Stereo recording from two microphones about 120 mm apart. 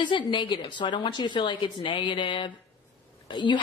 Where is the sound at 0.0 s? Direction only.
40° left (ahead or behind).